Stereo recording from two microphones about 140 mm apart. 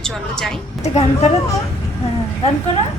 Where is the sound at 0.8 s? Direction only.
50° left (ahead or behind).